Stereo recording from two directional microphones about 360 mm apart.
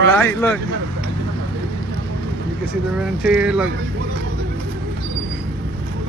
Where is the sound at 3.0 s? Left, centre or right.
Centre.